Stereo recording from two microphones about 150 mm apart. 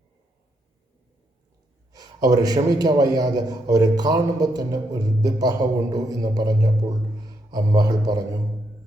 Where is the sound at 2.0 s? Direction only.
25° right (ahead or behind).